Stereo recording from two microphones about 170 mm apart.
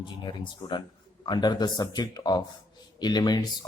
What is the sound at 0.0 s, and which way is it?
Speech, 25° left (ahead or behind).